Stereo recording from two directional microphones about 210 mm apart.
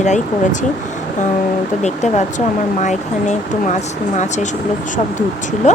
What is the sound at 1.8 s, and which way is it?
Speech, 35° left (ahead or behind).